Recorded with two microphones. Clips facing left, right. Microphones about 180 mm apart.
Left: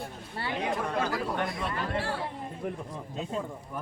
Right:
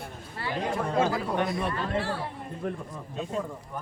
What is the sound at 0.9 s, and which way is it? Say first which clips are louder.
Speech: right 4 dB; 25° right (ahead or behind).